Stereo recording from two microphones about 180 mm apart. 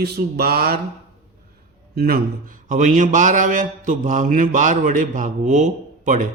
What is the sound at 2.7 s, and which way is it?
A man's voice, 45° right (ahead or behind).